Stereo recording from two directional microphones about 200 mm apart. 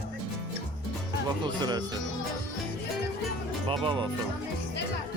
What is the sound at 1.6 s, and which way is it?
Speech, 20° right (ahead or behind).